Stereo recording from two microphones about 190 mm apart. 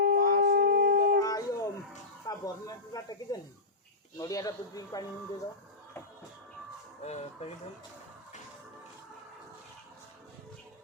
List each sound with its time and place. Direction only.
0.0 s howl: 55° right (ahead or behind)
1.2 s howl: 20° left (ahead or behind)
2.2 s snake: 20° left (ahead or behind)
4.2 s speech: 20° left (ahead or behind)
7.0 s speech: 35° left (ahead or behind)